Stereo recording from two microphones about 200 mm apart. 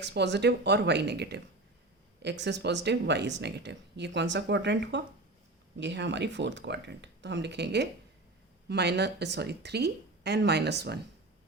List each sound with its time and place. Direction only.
0.0 s speech: 60° right (ahead or behind)
2.4 s speech: 60° right (ahead or behind)